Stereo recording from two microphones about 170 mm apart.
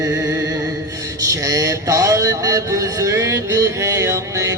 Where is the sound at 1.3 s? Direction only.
20° right (ahead or behind).